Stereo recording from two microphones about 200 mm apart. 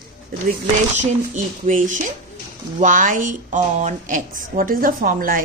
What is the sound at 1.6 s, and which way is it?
A woman's voice, 40° right (ahead or behind).